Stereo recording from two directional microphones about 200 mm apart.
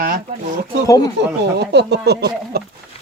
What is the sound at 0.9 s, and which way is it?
Speech, 20° left (ahead or behind).